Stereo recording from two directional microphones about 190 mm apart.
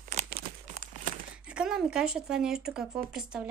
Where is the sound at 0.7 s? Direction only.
40° right (ahead or behind).